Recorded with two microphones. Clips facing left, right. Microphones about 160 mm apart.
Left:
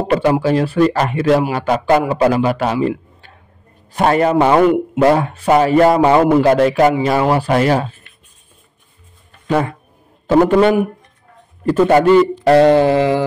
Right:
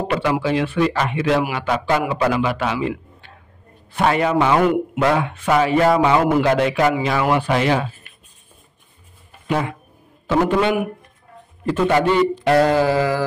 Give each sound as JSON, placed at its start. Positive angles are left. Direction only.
{"t": 0.1, "sound": "a man's voice", "side_deg": 45}
{"t": 3.9, "sound": "a man's voice", "side_deg": 40}
{"t": 4.5, "sound": "a man's voice", "side_deg": 25}
{"t": 5.0, "sound": "speech", "side_deg": 40}
{"t": 9.5, "sound": "a man's voice", "side_deg": 40}
{"t": 12.5, "sound": "mantra", "side_deg": 30}